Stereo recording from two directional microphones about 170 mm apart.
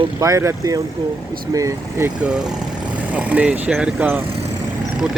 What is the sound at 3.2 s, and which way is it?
Speech, 10° right (ahead or behind).